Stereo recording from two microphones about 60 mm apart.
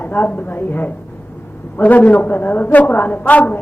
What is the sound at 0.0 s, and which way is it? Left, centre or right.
A woman's voice, left.